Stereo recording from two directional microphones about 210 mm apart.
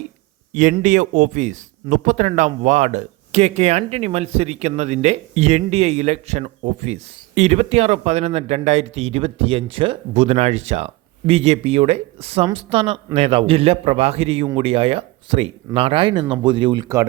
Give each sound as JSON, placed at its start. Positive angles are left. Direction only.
{"t": 0.5, "sound": "speech", "side_deg": -35}